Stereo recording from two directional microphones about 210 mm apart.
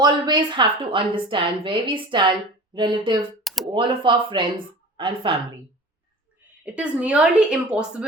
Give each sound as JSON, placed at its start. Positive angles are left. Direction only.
{"t": 0.0, "sound": "a woman's voice", "side_deg": -20}
{"t": 3.4, "sound": "a sound", "side_deg": 0}
{"t": 3.7, "sound": "a woman's voice", "side_deg": -25}
{"t": 6.7, "sound": "a woman's voice", "side_deg": -5}